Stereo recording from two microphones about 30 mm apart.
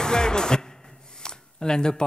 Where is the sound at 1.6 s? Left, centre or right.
Left.